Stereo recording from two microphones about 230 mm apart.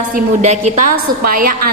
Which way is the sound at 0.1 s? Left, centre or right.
Right.